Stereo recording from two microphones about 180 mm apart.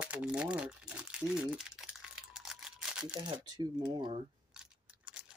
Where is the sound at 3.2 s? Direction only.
25° right (ahead or behind).